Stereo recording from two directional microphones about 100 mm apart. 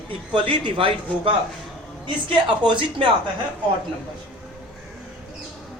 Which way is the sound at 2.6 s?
55° right (ahead or behind).